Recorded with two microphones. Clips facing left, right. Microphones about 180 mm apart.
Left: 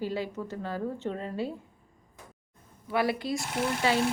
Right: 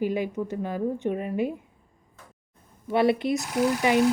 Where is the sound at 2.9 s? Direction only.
25° right (ahead or behind).